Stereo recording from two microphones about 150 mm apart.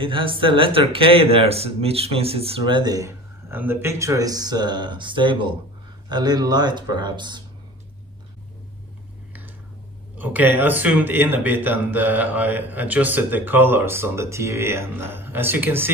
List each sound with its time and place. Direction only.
0.0 s speech: 35° right (ahead or behind)
10.1 s speech: 10° right (ahead or behind)